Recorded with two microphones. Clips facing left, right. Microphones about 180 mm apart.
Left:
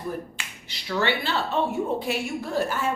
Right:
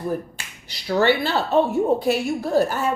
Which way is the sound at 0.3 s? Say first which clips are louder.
Even; 40° right (ahead or behind).